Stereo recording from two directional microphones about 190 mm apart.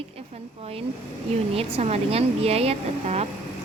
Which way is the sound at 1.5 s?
35° right (ahead or behind).